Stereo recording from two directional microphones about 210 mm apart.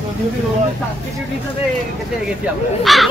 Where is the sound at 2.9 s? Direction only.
Centre (ahead or behind).